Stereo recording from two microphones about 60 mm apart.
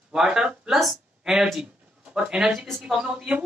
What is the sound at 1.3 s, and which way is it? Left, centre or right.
A woman's voice, centre.